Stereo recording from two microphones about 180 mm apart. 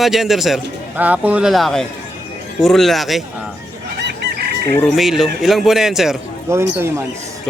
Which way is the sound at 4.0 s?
65° right (ahead or behind).